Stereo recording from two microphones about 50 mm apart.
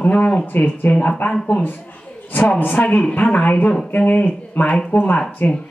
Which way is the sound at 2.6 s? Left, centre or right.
Left.